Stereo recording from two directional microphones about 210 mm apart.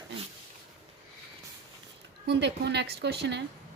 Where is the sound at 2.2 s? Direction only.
55° right (ahead or behind).